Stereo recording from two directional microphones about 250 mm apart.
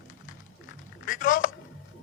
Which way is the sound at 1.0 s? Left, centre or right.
Left.